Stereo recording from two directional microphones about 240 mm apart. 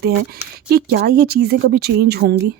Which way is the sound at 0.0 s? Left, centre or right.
Right.